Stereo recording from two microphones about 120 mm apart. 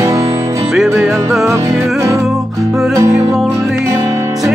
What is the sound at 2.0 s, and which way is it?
Music, 25° right (ahead or behind).